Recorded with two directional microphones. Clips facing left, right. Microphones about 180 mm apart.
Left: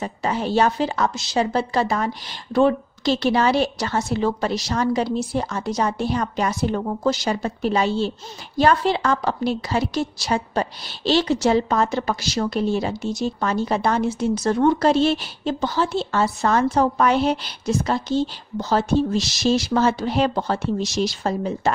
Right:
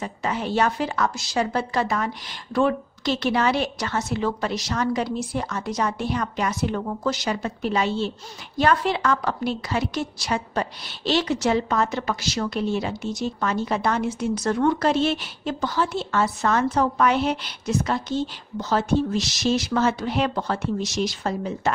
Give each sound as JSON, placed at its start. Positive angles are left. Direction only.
{"t": 0.0, "sound": "a woman's voice", "side_deg": 35}